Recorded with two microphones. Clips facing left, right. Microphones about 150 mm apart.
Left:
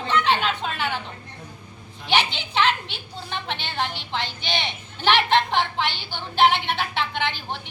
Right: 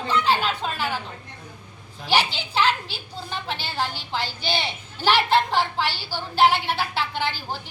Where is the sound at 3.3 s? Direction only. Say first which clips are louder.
Even; 5° right (ahead or behind).